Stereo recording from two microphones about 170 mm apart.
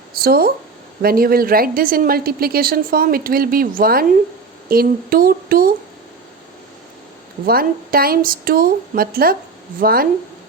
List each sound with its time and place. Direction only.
0.1 s a sound: 60° right (ahead or behind)
1.0 s a woman's voice: 60° right (ahead or behind)
7.4 s a woman's voice: 60° right (ahead or behind)